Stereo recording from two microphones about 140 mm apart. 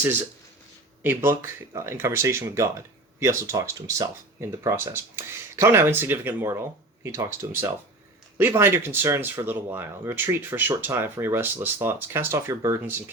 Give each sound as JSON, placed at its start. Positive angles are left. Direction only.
{"t": 1.0, "sound": "speech", "side_deg": -15}
{"t": 8.4, "sound": "speech", "side_deg": -15}